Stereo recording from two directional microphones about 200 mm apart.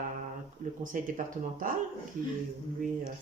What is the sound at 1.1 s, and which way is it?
Speech, 40° right (ahead or behind).